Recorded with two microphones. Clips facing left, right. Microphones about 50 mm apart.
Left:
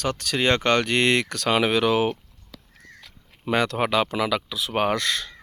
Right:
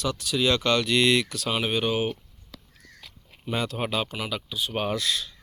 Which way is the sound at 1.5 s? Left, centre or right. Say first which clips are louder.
Left 8 dB; left.